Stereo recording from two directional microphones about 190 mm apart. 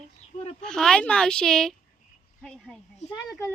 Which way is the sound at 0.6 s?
5° left (ahead or behind).